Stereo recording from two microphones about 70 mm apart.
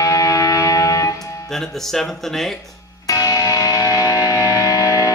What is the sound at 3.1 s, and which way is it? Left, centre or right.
Music, left.